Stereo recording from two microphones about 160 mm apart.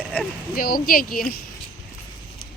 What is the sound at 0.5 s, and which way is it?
Speech, 65° left (ahead or behind).